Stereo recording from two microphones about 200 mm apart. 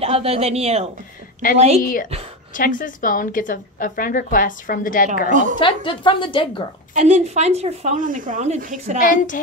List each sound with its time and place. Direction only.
0.0 s speech: 30° right (ahead or behind)
1.8 s a woman's voice: 45° left (ahead or behind)
5.3 s speech: 40° right (ahead or behind)
5.6 s a woman's voice: 25° left (ahead or behind)
6.9 s speech: 35° right (ahead or behind)
9.0 s a woman's voice: 40° left (ahead or behind)